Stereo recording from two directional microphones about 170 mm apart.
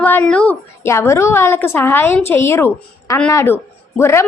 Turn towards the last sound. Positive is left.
turn(degrees=15)  # may be behind; listen again after turning